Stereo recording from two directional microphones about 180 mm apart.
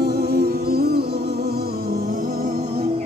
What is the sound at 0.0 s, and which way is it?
Music, 60° right (ahead or behind).